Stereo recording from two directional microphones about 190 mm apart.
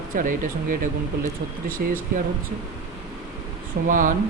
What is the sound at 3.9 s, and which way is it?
Speech, 45° right (ahead or behind).